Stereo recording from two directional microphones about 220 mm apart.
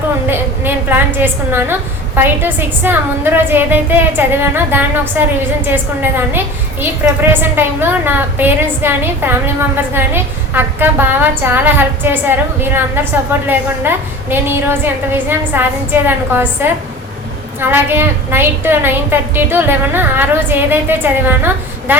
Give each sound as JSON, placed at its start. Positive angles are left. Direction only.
{"t": 0.3, "sound": "a woman's voice", "side_deg": -10}
{"t": 13.5, "sound": "a woman's voice", "side_deg": -10}